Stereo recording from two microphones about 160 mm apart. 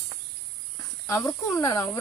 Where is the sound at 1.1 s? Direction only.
20° left (ahead or behind).